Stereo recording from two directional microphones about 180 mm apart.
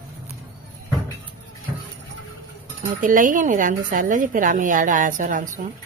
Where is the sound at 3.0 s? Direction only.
45° right (ahead or behind).